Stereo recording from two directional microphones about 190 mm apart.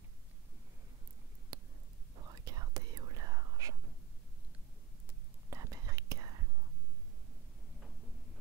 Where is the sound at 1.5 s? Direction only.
20° right (ahead or behind).